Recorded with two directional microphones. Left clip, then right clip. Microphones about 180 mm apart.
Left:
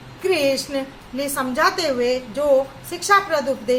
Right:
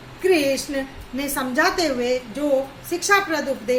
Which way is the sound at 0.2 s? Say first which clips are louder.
Even; 20° right (ahead or behind).